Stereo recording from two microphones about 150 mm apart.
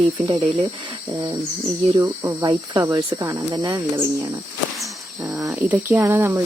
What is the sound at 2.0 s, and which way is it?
Speech, 20° right (ahead or behind).